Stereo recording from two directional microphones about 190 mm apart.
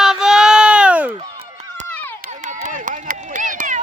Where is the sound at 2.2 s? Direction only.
40° right (ahead or behind).